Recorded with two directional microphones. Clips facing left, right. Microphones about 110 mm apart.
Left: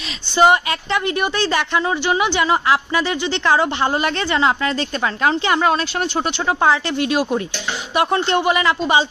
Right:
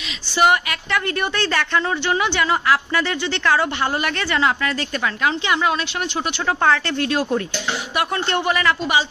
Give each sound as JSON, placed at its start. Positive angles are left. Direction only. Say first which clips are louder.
{"t": 0.4, "sound": "a woman's voice", "louder": "left 3 dB", "side_deg": 25}
{"t": 5.2, "sound": "a woman's voice", "louder": "left 4 dB", "side_deg": 40}
{"t": 6.6, "sound": "a woman's voice", "louder": "left 2 dB", "side_deg": 15}